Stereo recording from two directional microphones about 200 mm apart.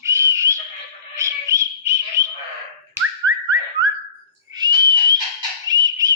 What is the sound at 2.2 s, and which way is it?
Bird, 15° right (ahead or behind).